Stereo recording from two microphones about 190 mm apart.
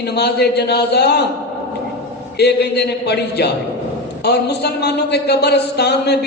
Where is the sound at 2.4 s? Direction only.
60° left (ahead or behind).